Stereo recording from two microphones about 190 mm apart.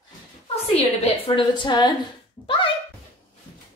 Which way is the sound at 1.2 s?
25° left (ahead or behind).